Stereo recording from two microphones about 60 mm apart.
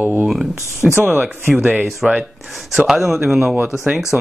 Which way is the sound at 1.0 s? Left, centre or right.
Right.